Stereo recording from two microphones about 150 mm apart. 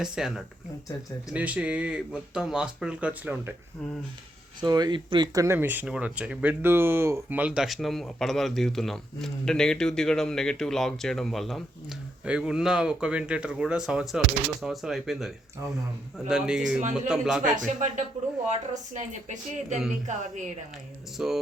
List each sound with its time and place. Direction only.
0.0 s speech: 5° right (ahead or behind)
4.6 s speech: 25° right (ahead or behind); by 15.3 s centre (ahead or behind)
16.3 s speech: 5° right (ahead or behind)
17.5 s speech: 55° right (ahead or behind)
21.2 s speech: 5° right (ahead or behind)